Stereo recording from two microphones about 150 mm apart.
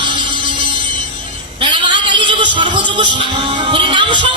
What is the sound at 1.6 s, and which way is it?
Music, 30° right (ahead or behind).